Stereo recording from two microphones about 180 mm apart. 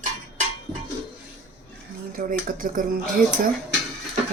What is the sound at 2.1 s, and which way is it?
Speech, 50° right (ahead or behind).